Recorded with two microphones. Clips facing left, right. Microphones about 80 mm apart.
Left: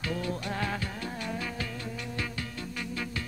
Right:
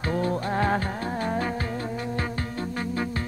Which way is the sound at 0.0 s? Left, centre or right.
Right.